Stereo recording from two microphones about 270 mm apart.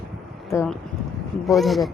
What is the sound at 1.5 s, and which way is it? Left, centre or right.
Speech, centre.